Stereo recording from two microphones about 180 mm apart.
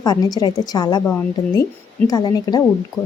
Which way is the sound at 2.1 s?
20° left (ahead or behind).